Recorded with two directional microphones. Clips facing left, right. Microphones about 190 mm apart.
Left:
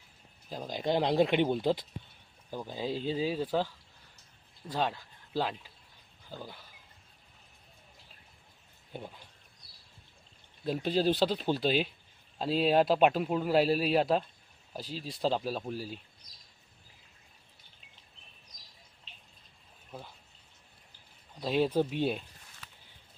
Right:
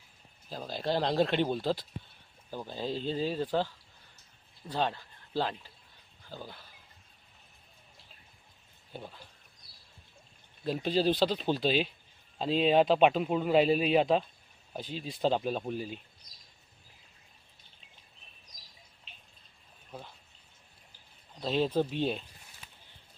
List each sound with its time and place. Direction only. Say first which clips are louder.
0.5 s speech: left 1 dB; 15° left (ahead or behind)
8.9 s speech: left 1 dB; 15° left (ahead or behind)
10.6 s speech: even; 5° left (ahead or behind)
19.9 s speech: even; 5° left (ahead or behind)
21.4 s speech: left 1 dB; 10° left (ahead or behind)